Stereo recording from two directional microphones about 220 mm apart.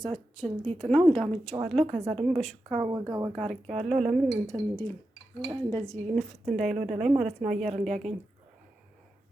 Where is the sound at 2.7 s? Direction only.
25° right (ahead or behind).